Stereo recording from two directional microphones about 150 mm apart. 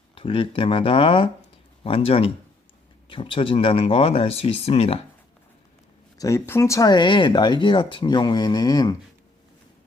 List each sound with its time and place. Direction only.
0.1 s speech: 35° left (ahead or behind)
6.1 s speech: 20° left (ahead or behind)